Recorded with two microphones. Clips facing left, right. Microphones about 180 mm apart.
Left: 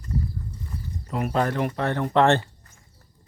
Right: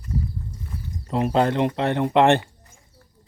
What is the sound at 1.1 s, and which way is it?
Speech, 25° right (ahead or behind).